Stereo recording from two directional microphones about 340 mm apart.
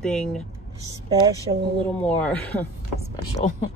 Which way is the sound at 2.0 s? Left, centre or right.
Centre.